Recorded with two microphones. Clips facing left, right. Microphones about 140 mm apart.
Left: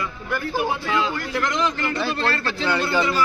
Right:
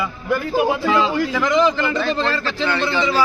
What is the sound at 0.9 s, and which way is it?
A man's voice, 90° right.